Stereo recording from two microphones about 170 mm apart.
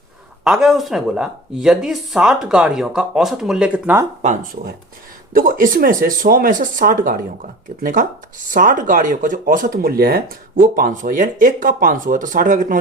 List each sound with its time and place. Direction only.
0.4 s speech: centre (ahead or behind)
5.3 s speech: 55° right (ahead or behind)